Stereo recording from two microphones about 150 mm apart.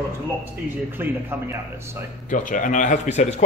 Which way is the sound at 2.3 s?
60° left (ahead or behind).